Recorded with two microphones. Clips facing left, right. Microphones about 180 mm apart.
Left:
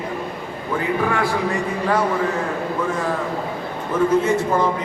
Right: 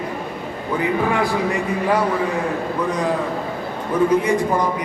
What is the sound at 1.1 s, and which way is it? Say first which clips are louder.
Speech: right 1 dB; 20° right (ahead or behind).